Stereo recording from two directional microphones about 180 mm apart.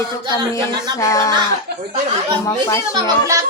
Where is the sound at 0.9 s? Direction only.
15° left (ahead or behind).